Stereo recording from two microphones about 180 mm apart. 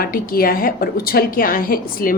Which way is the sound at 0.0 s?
55° left (ahead or behind).